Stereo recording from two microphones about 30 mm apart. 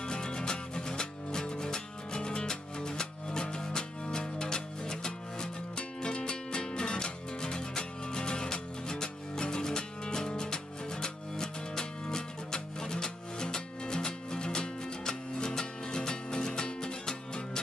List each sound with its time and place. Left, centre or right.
0.0 s music: left